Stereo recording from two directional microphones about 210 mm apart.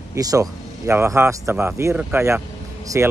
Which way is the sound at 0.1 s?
15° right (ahead or behind).